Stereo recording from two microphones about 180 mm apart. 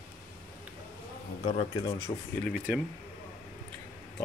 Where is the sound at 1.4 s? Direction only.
35° left (ahead or behind).